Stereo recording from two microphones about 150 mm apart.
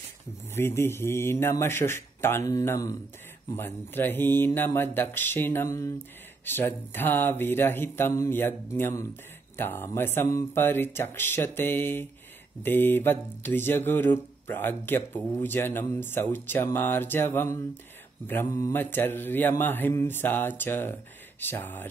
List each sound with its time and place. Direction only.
0.6 s speech: 15° left (ahead or behind)